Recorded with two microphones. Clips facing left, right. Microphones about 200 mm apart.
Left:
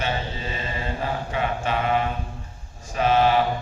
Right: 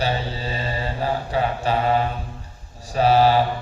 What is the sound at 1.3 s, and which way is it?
Mantra, 35° right (ahead or behind).